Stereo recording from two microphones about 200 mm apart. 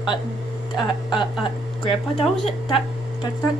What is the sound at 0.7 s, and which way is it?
Speech, 25° left (ahead or behind).